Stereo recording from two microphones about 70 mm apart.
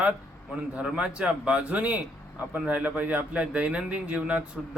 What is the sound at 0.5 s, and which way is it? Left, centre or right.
A man's voice, centre.